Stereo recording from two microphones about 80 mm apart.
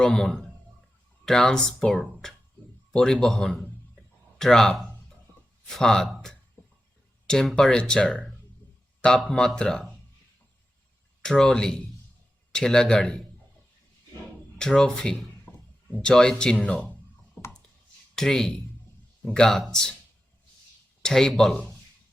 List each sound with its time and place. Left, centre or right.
0.0 s speech: centre
2.2 s music: centre
2.9 s speech: centre
4.4 s a sound: centre
5.7 s speech: centre
9.0 s a sound: centre
9.6 s speech: centre
11.2 s speech: centre
14.6 s speech: centre
15.5 s a sound: left
15.9 s speech: centre
18.1 s speech: centre
21.0 s speech: centre